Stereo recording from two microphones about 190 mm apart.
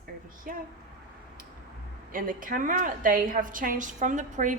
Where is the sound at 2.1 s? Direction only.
45° right (ahead or behind).